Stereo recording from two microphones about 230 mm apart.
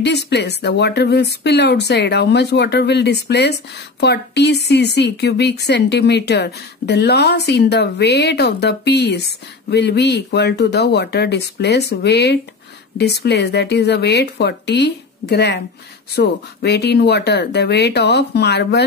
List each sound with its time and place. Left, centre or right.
0.0 s speech: left